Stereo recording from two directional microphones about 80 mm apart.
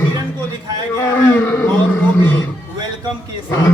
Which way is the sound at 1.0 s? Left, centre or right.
Left.